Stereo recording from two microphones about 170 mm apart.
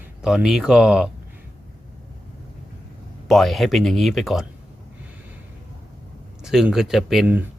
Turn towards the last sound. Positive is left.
turn(degrees=-10)  # may be behind; listen again after turning